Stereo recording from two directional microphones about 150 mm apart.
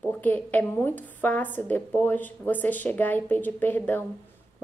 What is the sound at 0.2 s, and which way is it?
A woman's voice, 10° left (ahead or behind).